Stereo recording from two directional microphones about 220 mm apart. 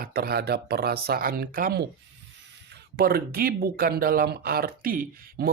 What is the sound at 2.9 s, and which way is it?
Speech, 45° right (ahead or behind).